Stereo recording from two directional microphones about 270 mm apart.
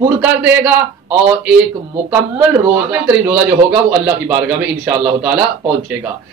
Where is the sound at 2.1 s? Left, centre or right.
Centre.